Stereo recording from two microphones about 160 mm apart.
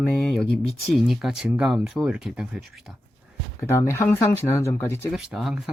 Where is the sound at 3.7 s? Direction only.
15° left (ahead or behind).